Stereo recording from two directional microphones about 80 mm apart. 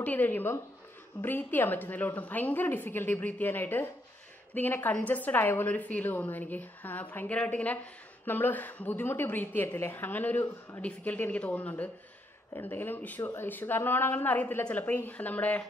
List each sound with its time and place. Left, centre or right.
0.0 s a woman's voice: left